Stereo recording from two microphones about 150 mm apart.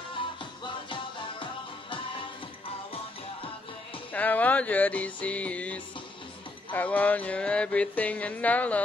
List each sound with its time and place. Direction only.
0.4 s music: 35° left (ahead or behind)
4.1 s music: 10° left (ahead or behind)